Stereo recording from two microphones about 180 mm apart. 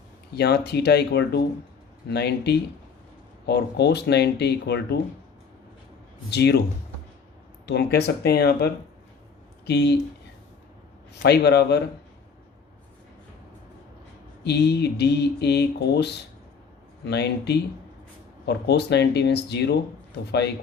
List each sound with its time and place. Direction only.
0.3 s speech: 65° left (ahead or behind)
6.3 s speech: 65° left (ahead or behind)
7.7 s speech: 65° left (ahead or behind)
11.1 s speech: 65° left (ahead or behind)
14.4 s speech: 65° left (ahead or behind)